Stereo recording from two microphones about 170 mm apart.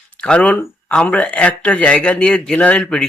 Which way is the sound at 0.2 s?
5° left (ahead or behind).